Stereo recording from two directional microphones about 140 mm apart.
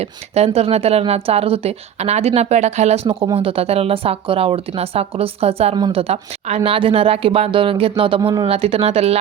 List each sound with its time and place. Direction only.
0.0 s speech: 45° right (ahead or behind)
5.7 s speech: 30° right (ahead or behind)
6.0 s speech: 45° right (ahead or behind)
8.2 s speech: 25° right (ahead or behind)
8.4 s speech: 45° right (ahead or behind)